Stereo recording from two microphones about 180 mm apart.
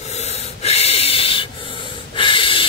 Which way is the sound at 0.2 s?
35° left (ahead or behind).